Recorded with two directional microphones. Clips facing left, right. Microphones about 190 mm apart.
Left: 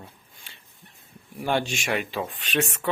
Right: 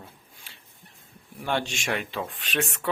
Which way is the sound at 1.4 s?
10° left (ahead or behind).